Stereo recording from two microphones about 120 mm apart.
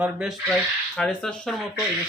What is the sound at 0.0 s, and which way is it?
Speech, 5° right (ahead or behind).